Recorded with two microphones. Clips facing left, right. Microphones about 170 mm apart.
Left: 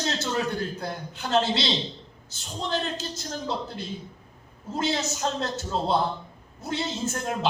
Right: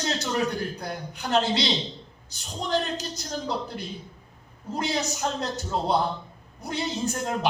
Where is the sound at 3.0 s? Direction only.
15° right (ahead or behind).